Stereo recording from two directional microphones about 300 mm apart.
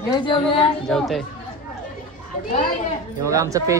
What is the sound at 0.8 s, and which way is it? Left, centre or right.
Speech, centre.